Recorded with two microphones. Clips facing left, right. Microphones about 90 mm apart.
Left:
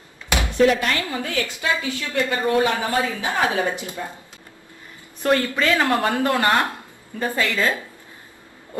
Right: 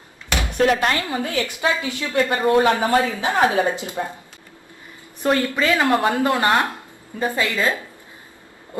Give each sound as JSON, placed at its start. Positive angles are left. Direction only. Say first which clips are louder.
{"t": 0.6, "sound": "speech", "louder": "left 1 dB", "side_deg": -50}
{"t": 0.9, "sound": "speech", "louder": "right 2 dB", "side_deg": -25}
{"t": 5.2, "sound": "a woman's voice", "louder": "even", "side_deg": -15}